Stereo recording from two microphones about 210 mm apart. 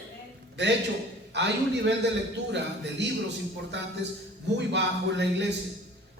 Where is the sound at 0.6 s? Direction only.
55° right (ahead or behind).